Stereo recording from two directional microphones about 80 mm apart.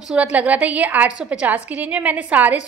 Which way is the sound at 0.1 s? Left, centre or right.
Centre.